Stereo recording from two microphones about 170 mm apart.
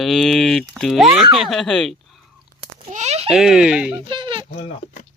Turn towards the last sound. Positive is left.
turn(degrees=35)  # may be behind; listen again after turning